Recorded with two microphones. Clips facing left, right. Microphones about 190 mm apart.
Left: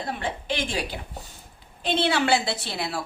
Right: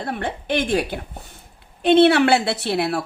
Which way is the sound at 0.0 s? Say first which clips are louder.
Right 4 dB; 55° right (ahead or behind).